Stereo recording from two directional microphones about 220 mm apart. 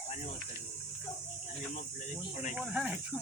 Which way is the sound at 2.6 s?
5° right (ahead or behind).